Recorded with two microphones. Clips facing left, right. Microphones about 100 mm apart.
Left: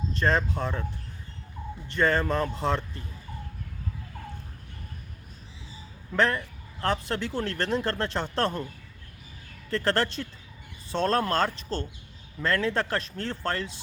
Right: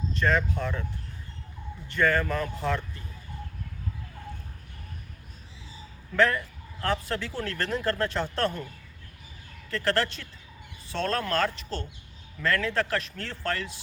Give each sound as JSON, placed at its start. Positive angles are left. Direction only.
{"t": 0.1, "sound": "speech", "side_deg": 35}
{"t": 1.9, "sound": "speech", "side_deg": 30}
{"t": 6.1, "sound": "speech", "side_deg": 25}
{"t": 9.6, "sound": "speech", "side_deg": 30}